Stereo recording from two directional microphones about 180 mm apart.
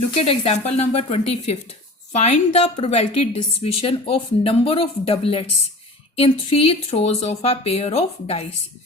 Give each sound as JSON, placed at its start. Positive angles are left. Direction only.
{"t": 0.2, "sound": "a woman's voice", "side_deg": 35}